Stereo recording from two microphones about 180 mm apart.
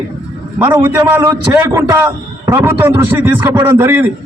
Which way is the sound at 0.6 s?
10° right (ahead or behind).